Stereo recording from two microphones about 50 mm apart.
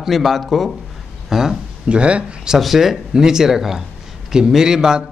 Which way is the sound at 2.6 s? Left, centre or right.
Centre.